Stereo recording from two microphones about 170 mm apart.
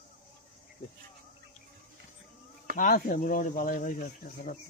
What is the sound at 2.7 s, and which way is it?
Speech, 55° left (ahead or behind).